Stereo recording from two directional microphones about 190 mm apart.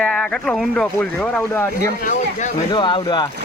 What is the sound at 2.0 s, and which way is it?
Speech, 40° left (ahead or behind).